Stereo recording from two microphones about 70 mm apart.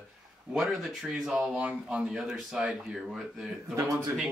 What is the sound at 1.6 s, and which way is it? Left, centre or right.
Speech, centre.